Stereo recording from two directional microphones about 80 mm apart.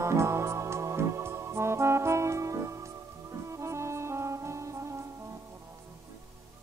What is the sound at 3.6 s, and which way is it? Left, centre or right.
Brass instrument, right.